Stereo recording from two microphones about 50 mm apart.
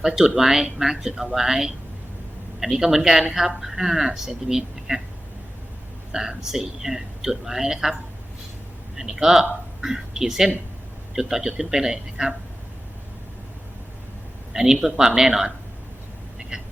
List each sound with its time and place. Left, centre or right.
0.2 s speech: centre
6.1 s speech: centre
9.0 s speech: centre
14.5 s speech: centre
16.4 s vehicle: centre